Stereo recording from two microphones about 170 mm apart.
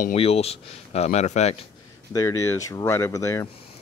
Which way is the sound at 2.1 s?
20° left (ahead or behind).